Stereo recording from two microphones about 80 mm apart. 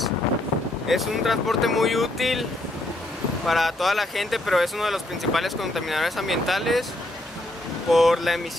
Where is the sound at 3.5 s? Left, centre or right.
Centre.